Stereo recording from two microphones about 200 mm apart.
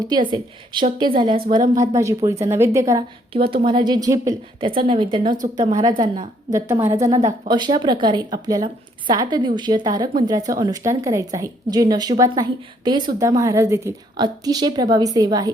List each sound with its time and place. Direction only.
0.0 s a woman's voice: 20° right (ahead or behind)
1.5 s a woman's voice: 40° right (ahead or behind)
2.0 s a woman's voice: 15° right (ahead or behind)
3.4 s a woman's voice: 50° right (ahead or behind)
3.7 s a woman's voice: 20° right (ahead or behind)